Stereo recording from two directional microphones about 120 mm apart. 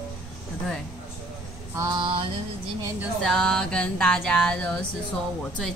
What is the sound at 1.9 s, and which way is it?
Mantra, 45° right (ahead or behind).